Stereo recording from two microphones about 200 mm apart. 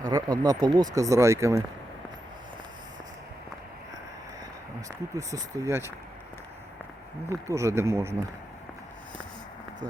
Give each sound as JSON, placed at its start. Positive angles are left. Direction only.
{"t": 0.1, "sound": "speech", "side_deg": -20}
{"t": 4.9, "sound": "speech", "side_deg": -15}
{"t": 7.3, "sound": "speech", "side_deg": -15}